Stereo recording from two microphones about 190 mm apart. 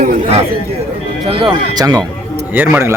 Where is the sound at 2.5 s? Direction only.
10° right (ahead or behind).